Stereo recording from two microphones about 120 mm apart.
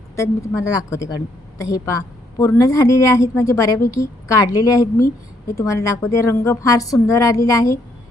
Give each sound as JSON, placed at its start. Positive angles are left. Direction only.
{"t": 0.2, "sound": "a woman's voice", "side_deg": 25}